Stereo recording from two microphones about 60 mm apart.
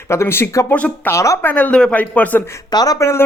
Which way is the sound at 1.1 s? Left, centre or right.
Left.